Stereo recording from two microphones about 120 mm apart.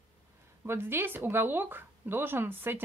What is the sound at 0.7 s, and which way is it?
Speech, 20° right (ahead or behind).